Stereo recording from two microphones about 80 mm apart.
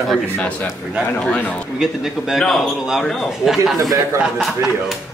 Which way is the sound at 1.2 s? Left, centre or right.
Centre.